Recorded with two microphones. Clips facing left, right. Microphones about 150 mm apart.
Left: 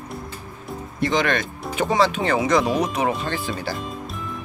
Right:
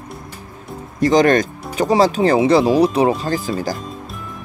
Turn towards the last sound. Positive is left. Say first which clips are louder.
# right 6 dB
turn(degrees=-40)  # may be behind; listen again after turning